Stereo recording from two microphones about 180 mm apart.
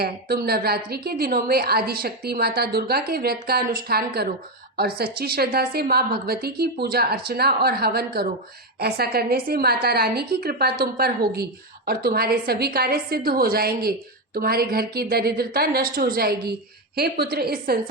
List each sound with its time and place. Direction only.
0.0 s a woman's voice: 60° right (ahead or behind)